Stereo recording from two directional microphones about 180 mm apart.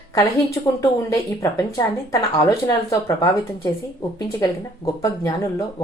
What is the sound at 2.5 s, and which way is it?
Speech, 20° left (ahead or behind).